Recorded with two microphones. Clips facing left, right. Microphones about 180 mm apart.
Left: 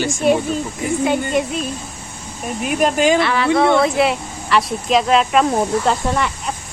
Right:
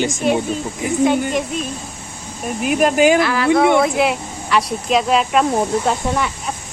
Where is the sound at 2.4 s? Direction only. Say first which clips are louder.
Right 2 dB; centre (ahead or behind).